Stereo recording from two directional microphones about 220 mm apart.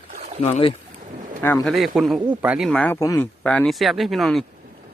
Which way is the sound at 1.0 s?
35° right (ahead or behind).